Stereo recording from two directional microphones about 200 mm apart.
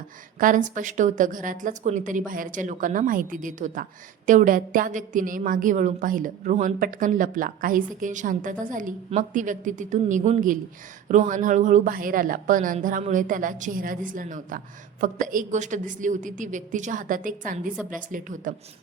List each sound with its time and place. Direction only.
0.3 s a woman's voice: 40° right (ahead or behind)